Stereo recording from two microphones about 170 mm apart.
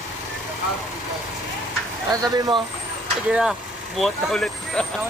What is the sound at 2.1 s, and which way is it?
Speech, 20° right (ahead or behind).